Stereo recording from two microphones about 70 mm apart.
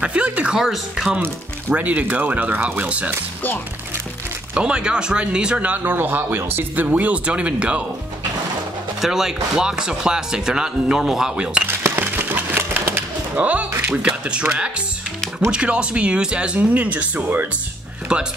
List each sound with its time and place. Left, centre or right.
0.0 s music: centre
0.6 s speech: centre
1.7 s speech: right
4.6 s speech: centre
9.0 s speech: centre
11.8 s a sound: right
13.8 s speech: centre
18.1 s speech: centre